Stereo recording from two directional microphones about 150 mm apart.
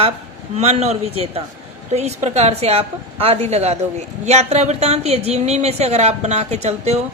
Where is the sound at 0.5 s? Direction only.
45° right (ahead or behind).